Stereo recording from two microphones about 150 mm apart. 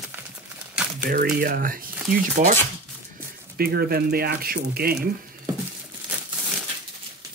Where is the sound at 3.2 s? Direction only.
80° right.